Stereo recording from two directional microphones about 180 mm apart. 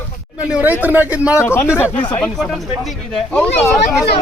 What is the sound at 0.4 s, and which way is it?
Speech, 10° right (ahead or behind).